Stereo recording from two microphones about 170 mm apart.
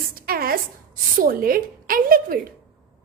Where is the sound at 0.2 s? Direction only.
60° right (ahead or behind).